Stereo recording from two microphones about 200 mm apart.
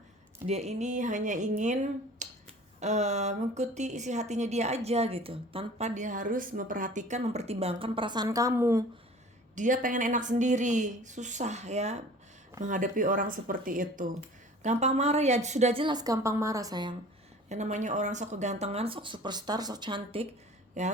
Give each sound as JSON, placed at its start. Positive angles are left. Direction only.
{"t": 0.4, "sound": "a woman's voice", "side_deg": -35}
{"t": 9.6, "sound": "a woman's voice", "side_deg": -40}
{"t": 17.5, "sound": "speech", "side_deg": -35}
{"t": 20.8, "sound": "a woman's voice", "side_deg": -35}